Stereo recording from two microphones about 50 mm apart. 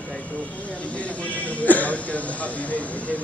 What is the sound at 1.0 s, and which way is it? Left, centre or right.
Speech, left.